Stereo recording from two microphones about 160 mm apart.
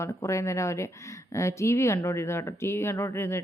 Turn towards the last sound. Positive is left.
turn(degrees=15)  # may be behind; listen again after turning